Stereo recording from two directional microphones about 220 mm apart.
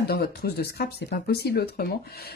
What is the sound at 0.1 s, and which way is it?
Speech, 45° left (ahead or behind).